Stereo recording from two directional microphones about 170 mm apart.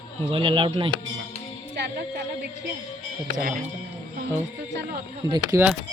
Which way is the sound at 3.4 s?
55° right (ahead or behind).